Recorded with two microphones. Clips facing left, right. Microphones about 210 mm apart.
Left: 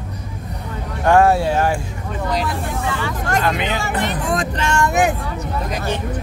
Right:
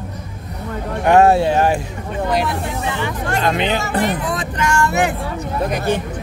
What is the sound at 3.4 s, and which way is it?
Speech, 30° right (ahead or behind).